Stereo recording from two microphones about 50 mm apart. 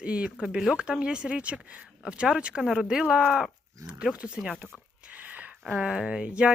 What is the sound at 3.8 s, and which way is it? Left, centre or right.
Speech, right.